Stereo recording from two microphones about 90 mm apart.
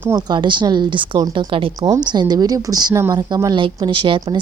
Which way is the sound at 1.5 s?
80° right.